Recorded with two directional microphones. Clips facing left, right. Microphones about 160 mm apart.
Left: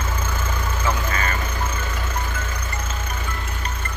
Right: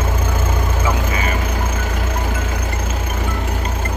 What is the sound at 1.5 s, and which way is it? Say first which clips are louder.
Music: right 5 dB; 75° right (ahead or behind).